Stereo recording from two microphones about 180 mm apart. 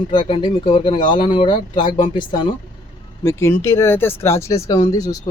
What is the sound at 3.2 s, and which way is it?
Speech, 15° left (ahead or behind).